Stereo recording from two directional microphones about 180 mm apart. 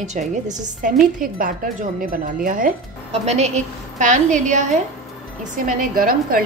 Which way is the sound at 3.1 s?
35° right (ahead or behind).